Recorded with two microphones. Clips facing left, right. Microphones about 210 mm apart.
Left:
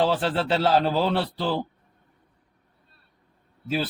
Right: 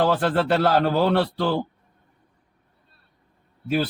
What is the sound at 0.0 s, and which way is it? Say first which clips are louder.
A man's voice: right 3 dB; 55° right (ahead or behind).